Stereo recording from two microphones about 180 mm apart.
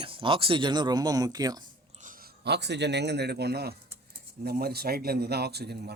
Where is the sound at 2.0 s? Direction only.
50° right (ahead or behind).